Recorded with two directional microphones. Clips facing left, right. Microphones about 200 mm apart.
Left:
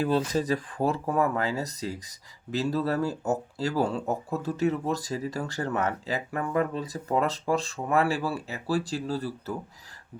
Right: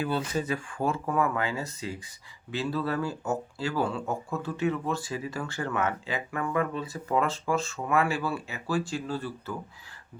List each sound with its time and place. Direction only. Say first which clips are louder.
0.3 s speech: left 3 dB; 35° left (ahead or behind)